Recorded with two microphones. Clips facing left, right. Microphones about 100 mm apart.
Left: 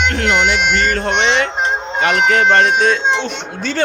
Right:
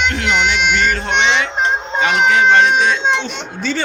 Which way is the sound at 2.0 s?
20° right (ahead or behind).